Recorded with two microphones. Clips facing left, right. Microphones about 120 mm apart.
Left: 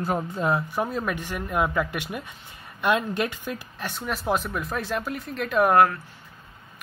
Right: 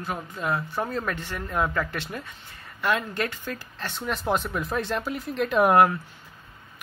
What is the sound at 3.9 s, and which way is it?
Speech, centre (ahead or behind).